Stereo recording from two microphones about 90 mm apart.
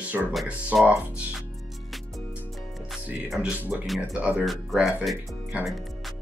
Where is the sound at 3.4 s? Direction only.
15° right (ahead or behind).